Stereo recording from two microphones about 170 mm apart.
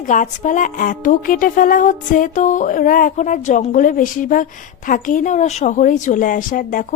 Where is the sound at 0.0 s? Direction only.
50° left (ahead or behind).